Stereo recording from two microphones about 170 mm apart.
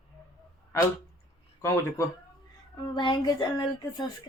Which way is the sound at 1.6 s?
15° left (ahead or behind).